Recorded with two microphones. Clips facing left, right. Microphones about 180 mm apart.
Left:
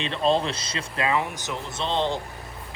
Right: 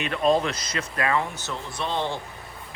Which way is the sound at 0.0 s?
30° left (ahead or behind).